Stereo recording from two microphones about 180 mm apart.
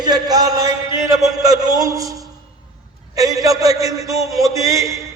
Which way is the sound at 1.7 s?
20° right (ahead or behind).